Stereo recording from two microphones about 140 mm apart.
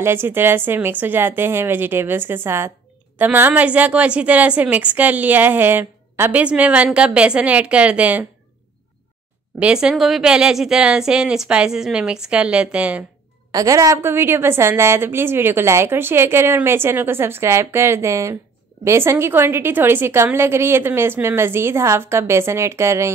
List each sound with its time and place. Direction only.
0.0 s a woman's voice: 15° right (ahead or behind)
9.6 s a woman's voice: 5° right (ahead or behind)
13.5 s a woman's voice: 25° right (ahead or behind)